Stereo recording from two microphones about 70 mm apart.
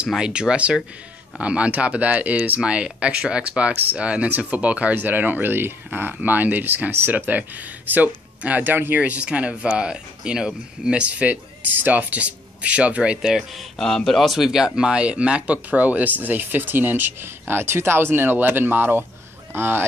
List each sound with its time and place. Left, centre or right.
0.0 s speech: centre; by 19.8 s right